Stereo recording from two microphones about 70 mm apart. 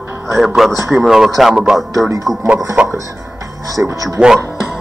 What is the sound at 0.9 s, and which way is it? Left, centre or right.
Speech, centre.